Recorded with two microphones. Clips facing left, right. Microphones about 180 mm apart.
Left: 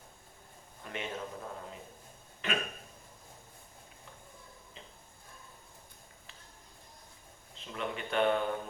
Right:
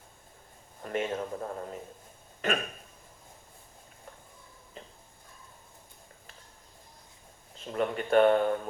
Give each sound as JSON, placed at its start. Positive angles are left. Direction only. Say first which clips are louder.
{"t": 0.8, "sound": "speech", "louder": "right 8 dB", "side_deg": -45}
{"t": 7.6, "sound": "speech", "louder": "right 7 dB", "side_deg": -45}